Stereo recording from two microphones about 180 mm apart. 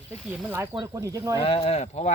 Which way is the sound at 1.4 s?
35° left (ahead or behind).